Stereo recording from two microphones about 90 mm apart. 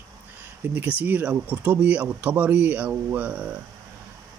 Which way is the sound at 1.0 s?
20° right (ahead or behind).